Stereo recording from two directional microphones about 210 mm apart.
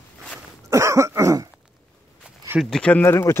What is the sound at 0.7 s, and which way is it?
Cough, 15° right (ahead or behind).